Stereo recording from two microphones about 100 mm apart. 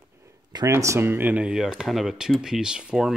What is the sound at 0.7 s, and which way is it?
Speech, 30° right (ahead or behind).